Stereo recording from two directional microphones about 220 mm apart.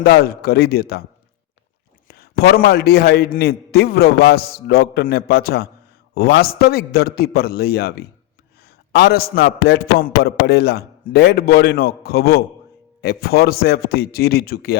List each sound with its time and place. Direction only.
0.0 s a man's voice: 45° left (ahead or behind)
2.0 s a man's voice: 45° left (ahead or behind)